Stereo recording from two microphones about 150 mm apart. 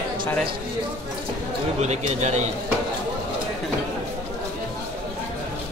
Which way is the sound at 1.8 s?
50° right (ahead or behind).